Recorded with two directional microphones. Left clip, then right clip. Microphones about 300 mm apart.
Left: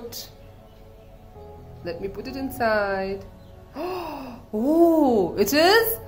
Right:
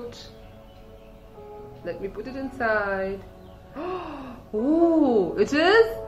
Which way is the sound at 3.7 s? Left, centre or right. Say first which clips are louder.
Left 1 dB; left.